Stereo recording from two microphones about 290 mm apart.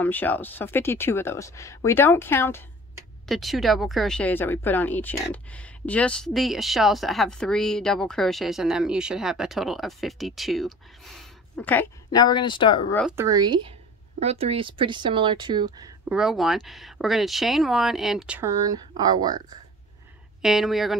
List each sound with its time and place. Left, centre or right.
0.0 s speech: centre
13.1 s speech: centre
16.1 s speech: centre
20.4 s speech: centre